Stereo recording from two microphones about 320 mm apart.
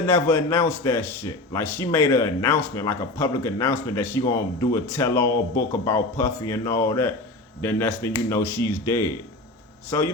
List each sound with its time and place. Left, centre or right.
0.0 s a man's voice: centre